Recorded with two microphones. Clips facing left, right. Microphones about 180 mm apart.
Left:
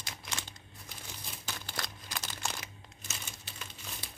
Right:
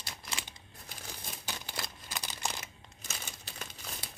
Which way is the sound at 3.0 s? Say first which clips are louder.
Right 2 dB; 40° right (ahead or behind).